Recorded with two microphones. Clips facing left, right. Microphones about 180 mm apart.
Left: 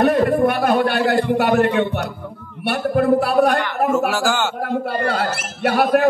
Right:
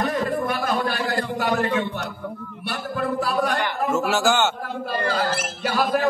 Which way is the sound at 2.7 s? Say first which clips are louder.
Left 10 dB; 60° left (ahead or behind).